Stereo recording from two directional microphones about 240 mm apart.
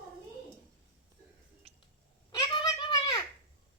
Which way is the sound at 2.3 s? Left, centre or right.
Centre.